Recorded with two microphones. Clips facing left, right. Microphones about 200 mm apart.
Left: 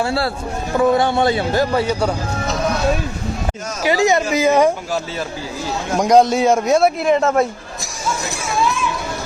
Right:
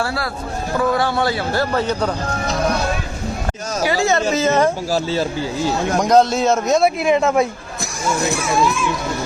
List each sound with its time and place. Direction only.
0.0 s a man's voice: 25° left (ahead or behind)
1.7 s a man's voice: 10° left (ahead or behind)
3.8 s a man's voice: 20° left (ahead or behind)
6.0 s a man's voice: 10° left (ahead or behind)